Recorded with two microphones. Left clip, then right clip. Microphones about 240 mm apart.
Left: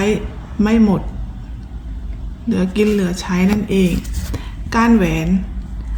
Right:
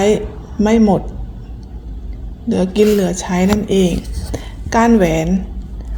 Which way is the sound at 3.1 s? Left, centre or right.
Centre.